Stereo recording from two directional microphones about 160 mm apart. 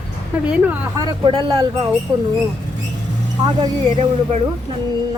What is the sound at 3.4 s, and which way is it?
Speech, 30° right (ahead or behind).